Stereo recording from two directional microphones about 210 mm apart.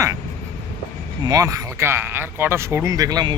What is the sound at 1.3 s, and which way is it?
Speech, 15° right (ahead or behind).